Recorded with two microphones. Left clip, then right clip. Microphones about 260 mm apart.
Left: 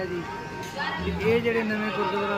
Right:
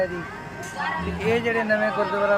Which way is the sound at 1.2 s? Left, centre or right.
Centre.